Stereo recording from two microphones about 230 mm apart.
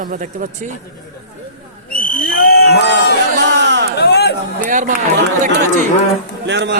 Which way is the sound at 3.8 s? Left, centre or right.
Left.